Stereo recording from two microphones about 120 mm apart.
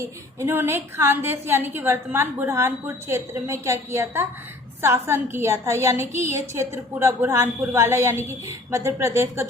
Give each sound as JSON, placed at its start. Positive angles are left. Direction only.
{"t": 0.0, "sound": "a woman's voice", "side_deg": -20}